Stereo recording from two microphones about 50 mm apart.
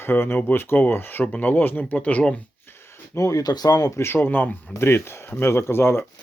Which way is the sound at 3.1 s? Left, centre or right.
Left.